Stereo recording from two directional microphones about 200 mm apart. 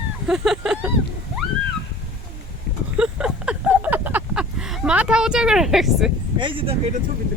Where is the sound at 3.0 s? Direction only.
5° right (ahead or behind).